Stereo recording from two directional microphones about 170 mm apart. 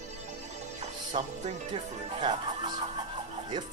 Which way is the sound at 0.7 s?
40° right (ahead or behind).